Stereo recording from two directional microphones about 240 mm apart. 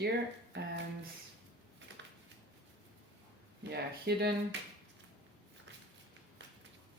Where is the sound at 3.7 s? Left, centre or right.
Right.